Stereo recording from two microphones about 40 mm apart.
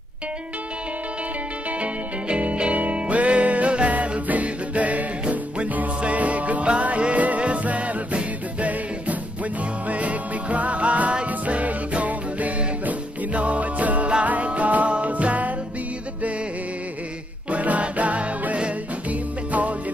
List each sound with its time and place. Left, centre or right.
1.8 s music: right
17.5 s music: right